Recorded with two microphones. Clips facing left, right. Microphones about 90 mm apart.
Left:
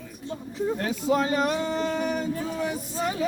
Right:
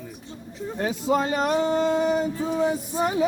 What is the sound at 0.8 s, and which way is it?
Speech, 5° right (ahead or behind).